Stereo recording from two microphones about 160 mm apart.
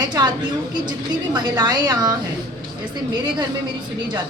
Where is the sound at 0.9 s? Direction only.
25° right (ahead or behind).